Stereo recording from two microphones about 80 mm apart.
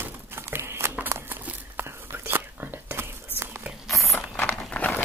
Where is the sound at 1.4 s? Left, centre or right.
Right.